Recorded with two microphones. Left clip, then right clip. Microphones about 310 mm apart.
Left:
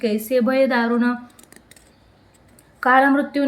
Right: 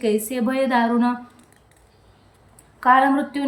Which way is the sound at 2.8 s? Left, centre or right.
Centre.